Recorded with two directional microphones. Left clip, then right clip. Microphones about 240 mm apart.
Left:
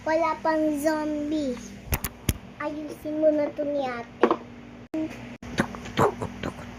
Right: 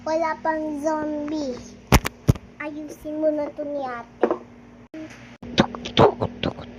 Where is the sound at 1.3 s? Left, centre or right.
Centre.